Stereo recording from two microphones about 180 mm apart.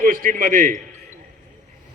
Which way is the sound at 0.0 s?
50° right (ahead or behind).